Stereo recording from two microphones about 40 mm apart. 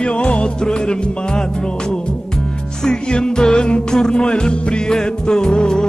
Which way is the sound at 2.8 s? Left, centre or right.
Centre.